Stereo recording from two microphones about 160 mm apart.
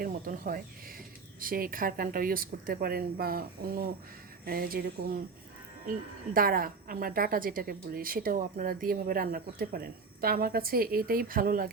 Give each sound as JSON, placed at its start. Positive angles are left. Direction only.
{"t": 0.0, "sound": "a woman's voice", "side_deg": -60}
{"t": 6.3, "sound": "a woman's voice", "side_deg": -65}